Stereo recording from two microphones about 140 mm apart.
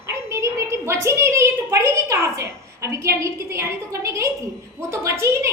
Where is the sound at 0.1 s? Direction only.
20° right (ahead or behind).